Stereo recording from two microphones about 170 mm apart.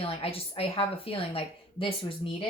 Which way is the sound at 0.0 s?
35° left (ahead or behind).